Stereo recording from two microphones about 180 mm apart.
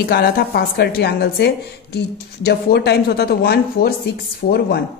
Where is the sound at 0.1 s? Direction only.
60° left (ahead or behind).